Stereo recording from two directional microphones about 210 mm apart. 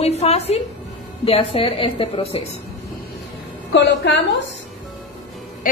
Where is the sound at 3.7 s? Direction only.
60° left (ahead or behind).